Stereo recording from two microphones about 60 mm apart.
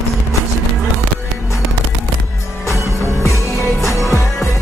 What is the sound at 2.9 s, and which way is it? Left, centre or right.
Music, left.